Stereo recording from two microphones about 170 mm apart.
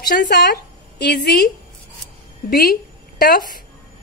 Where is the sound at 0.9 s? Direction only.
70° left (ahead or behind).